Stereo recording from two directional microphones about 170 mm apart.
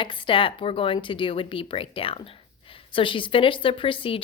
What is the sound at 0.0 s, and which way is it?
Speech, 30° left (ahead or behind).